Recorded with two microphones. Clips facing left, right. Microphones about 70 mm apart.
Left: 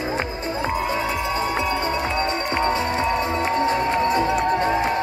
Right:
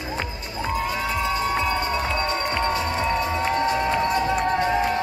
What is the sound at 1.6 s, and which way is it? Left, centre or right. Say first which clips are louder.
Music: left 1 dB; left.